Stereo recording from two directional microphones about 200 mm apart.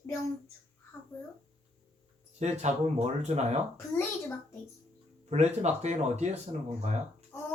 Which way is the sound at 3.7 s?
15° left (ahead or behind).